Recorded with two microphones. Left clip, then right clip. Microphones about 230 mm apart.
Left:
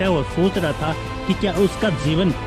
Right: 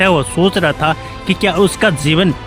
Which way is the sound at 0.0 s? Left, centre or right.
Right.